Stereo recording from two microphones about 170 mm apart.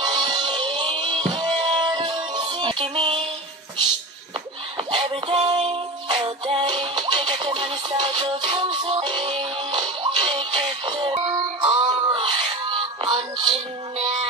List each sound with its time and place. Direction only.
0.0 s music: 25° right (ahead or behind)
4.7 s music: 30° right (ahead or behind)